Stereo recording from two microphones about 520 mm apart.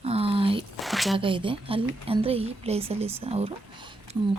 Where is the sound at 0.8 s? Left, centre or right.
Centre.